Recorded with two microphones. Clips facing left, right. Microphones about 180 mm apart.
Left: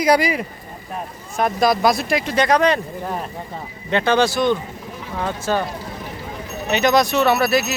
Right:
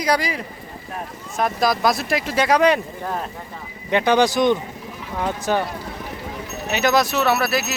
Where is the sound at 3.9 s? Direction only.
15° right (ahead or behind).